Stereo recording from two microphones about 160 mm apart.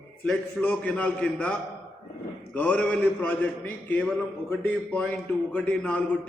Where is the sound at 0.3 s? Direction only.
10° left (ahead or behind).